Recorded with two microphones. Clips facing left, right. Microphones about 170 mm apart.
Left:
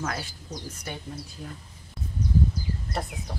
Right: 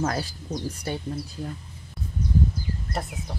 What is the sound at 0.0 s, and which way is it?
Speech, 35° right (ahead or behind).